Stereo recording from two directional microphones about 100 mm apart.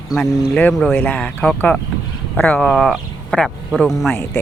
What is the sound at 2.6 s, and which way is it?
Speech, centre (ahead or behind).